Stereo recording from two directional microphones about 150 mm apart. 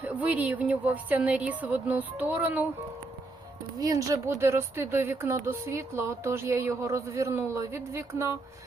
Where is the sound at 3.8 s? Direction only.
25° right (ahead or behind).